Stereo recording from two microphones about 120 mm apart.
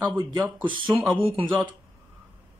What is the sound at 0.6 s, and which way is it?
Speech, 45° right (ahead or behind).